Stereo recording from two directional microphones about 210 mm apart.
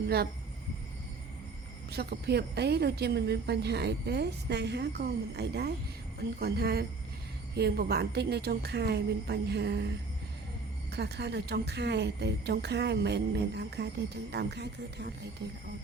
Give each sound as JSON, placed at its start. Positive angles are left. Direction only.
{"t": 1.9, "sound": "speech", "side_deg": -50}
{"t": 10.9, "sound": "speech", "side_deg": -50}